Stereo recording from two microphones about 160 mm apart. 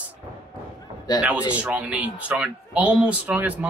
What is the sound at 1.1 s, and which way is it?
Speech, 25° left (ahead or behind).